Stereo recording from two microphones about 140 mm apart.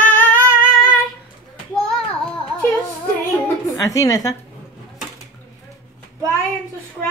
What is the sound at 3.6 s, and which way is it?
Speech, 25° left (ahead or behind).